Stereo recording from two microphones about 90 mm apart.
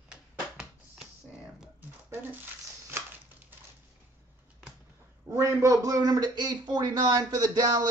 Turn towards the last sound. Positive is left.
turn(degrees=-50)  # may be behind; listen again after turning